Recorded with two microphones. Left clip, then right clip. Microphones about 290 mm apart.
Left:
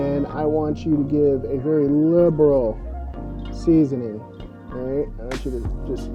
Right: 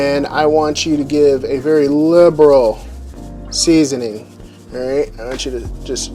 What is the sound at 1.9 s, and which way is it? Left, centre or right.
Speech, centre.